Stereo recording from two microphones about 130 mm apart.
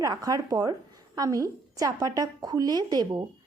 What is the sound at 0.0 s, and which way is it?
A woman's voice, 30° right (ahead or behind).